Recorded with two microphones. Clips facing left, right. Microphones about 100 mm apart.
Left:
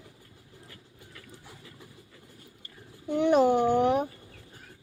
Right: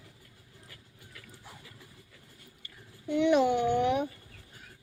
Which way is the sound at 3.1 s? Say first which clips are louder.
Left 2 dB; 40° left (ahead or behind).